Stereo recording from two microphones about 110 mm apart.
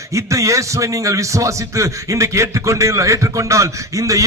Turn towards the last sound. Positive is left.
turn(degrees=-30)  # may be behind; listen again after turning